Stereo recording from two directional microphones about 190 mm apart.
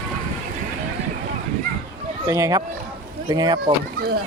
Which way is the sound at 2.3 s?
20° right (ahead or behind).